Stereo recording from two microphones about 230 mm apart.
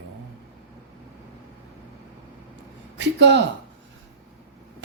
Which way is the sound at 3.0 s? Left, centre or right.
Right.